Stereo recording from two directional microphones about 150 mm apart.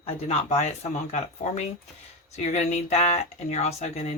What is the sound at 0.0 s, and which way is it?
Speech, 40° left (ahead or behind).